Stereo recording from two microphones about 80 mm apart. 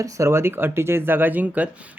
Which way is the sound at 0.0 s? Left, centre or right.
Right.